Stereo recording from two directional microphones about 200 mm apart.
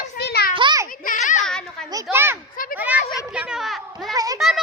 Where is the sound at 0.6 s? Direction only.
25° right (ahead or behind).